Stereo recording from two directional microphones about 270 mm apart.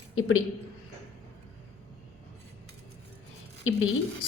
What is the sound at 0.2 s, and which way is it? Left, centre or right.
Speech, left.